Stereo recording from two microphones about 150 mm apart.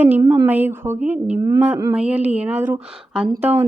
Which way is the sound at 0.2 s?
20° right (ahead or behind).